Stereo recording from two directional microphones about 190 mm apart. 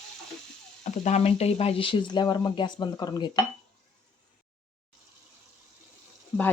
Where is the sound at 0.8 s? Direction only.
40° left (ahead or behind); by 3.4 s 20° left (ahead or behind).